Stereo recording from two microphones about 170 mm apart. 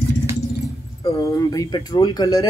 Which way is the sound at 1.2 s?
20° left (ahead or behind).